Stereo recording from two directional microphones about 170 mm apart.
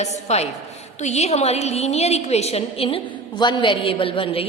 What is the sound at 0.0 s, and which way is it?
A woman's voice, 40° left (ahead or behind).